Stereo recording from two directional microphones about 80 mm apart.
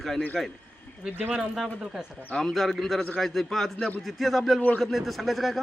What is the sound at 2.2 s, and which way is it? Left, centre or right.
A man's voice, centre.